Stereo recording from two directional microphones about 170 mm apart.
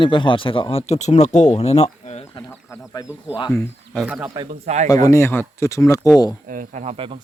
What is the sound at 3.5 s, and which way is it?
Speech, 10° left (ahead or behind).